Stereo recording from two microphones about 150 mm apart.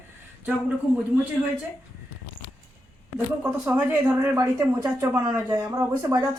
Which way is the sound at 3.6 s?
10° right (ahead or behind).